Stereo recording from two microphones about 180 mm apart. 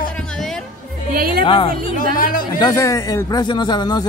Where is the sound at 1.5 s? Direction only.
30° left (ahead or behind).